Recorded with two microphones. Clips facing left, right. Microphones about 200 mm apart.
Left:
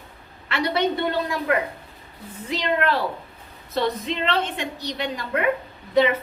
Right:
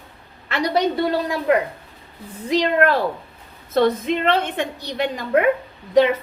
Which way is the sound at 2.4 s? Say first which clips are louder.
Right 6 dB; 45° right (ahead or behind).